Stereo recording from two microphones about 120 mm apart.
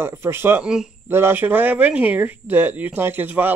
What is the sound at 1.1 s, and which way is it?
Speech, 20° right (ahead or behind).